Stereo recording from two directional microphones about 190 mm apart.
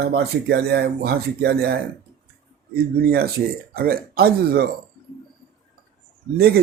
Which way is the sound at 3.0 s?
55° right (ahead or behind).